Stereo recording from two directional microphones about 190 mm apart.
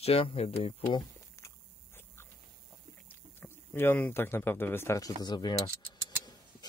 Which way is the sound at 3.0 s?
10° left (ahead or behind).